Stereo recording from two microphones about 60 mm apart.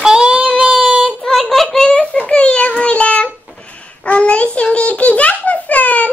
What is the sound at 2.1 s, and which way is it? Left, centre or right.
Child singing, left.